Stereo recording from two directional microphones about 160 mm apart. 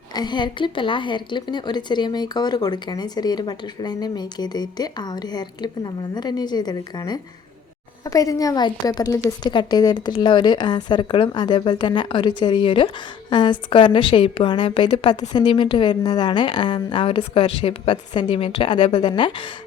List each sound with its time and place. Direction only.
0.1 s a woman's voice: 25° left (ahead or behind)